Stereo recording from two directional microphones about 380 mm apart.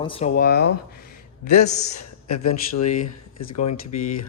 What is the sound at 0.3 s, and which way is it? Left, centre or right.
Speech, left.